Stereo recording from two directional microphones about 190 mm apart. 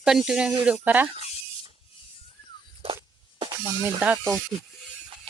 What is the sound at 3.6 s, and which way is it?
Speech, 10° right (ahead or behind).